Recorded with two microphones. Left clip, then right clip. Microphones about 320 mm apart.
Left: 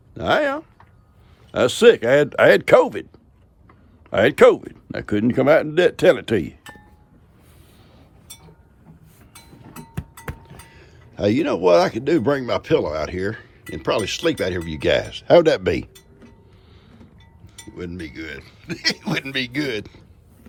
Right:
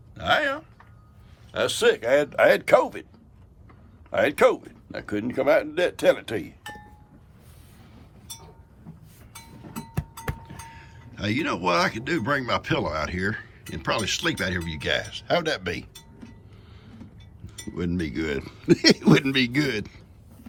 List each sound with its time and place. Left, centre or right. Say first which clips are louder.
0.1 s a sound: left 4 dB; centre
1.5 s speech: left 8 dB; left
4.1 s speech: left 7 dB; left
9.5 s speech: right 2 dB; centre
17.7 s speech: right 3 dB; centre